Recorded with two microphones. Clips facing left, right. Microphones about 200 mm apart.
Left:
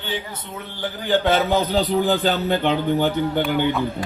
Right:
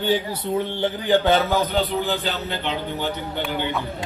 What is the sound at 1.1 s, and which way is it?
Speech, 15° right (ahead or behind).